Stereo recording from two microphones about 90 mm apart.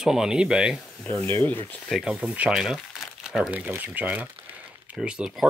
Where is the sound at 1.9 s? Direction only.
5° right (ahead or behind).